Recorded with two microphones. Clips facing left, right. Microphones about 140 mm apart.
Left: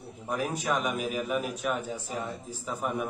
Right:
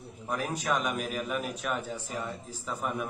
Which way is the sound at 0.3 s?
Centre (ahead or behind).